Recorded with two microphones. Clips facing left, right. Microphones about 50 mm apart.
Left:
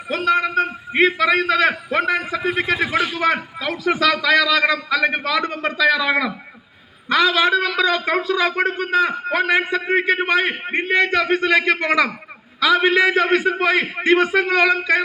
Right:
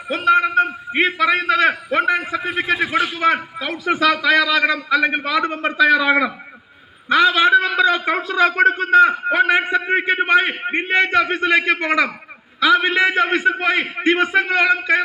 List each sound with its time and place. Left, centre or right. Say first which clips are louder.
0.1 s a man's voice: right 3 dB; centre